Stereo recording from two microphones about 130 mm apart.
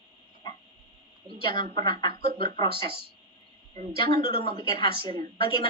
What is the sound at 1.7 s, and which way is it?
Speech, 40° left (ahead or behind).